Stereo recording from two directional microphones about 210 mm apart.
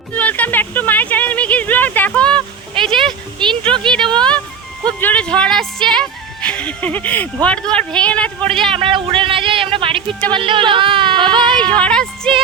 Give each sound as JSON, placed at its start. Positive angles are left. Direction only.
{"t": 0.1, "sound": "music", "side_deg": 5}
{"t": 2.9, "sound": "a sound", "side_deg": -25}
{"t": 3.5, "sound": "speech", "side_deg": 5}
{"t": 8.7, "sound": "speech", "side_deg": -25}
{"t": 10.1, "sound": "speech", "side_deg": 5}
{"t": 10.3, "sound": "speech", "side_deg": -25}
{"t": 11.7, "sound": "speech", "side_deg": 5}